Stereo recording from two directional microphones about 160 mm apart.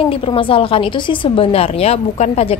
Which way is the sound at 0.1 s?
35° left (ahead or behind).